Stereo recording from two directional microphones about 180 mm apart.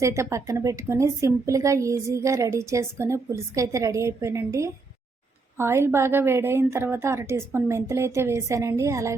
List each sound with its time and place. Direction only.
0.0 s a woman's voice: 15° right (ahead or behind)